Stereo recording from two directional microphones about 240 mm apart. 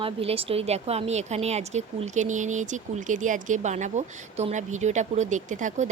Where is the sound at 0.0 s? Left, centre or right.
Right.